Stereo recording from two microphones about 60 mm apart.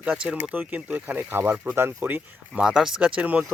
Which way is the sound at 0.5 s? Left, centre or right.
Right.